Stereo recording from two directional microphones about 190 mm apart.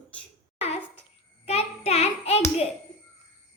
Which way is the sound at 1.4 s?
35° left (ahead or behind).